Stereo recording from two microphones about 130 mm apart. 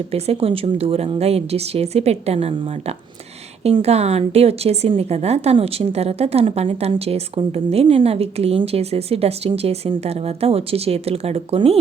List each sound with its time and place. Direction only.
0.1 s a woman's voice: 50° right (ahead or behind)